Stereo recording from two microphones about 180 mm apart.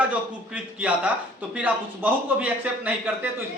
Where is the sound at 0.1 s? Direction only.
5° right (ahead or behind).